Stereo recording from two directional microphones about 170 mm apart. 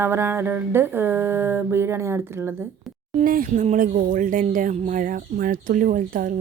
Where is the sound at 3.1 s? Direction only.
55° right (ahead or behind).